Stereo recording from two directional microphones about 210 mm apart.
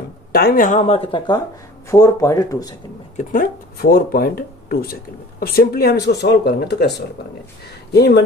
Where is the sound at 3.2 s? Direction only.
40° left (ahead or behind).